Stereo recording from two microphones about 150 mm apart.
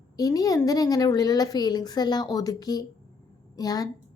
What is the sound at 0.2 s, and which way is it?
A woman's voice, 25° left (ahead or behind).